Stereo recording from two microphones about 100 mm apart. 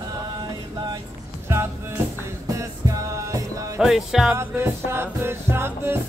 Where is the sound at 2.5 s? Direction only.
35° right (ahead or behind).